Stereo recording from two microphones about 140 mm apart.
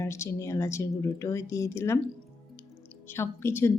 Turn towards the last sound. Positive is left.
turn(degrees=20)  # may be behind; listen again after turning